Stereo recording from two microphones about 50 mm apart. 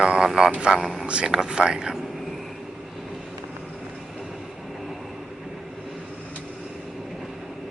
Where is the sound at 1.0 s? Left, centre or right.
Centre.